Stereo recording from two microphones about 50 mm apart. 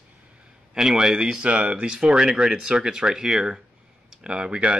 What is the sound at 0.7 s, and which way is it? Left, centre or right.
Speech, centre.